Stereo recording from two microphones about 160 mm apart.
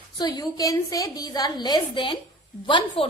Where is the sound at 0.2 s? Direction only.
25° left (ahead or behind).